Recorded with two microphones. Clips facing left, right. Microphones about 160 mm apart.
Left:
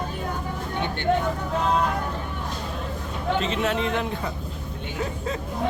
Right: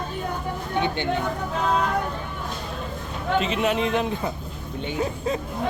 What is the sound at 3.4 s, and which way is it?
A man's voice, 15° right (ahead or behind).